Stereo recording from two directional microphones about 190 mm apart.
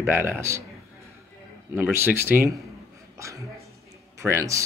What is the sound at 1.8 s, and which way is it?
Speech, 10° right (ahead or behind).